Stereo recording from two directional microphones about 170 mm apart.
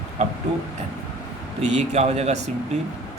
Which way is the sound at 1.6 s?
40° right (ahead or behind).